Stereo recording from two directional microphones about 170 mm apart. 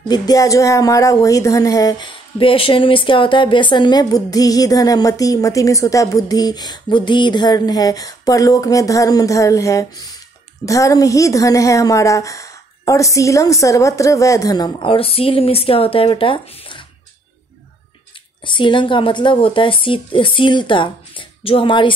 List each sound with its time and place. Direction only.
0.1 s speech: 20° left (ahead or behind)
18.4 s speech: 30° left (ahead or behind)